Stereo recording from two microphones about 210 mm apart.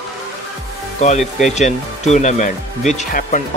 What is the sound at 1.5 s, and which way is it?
Speech, 35° left (ahead or behind).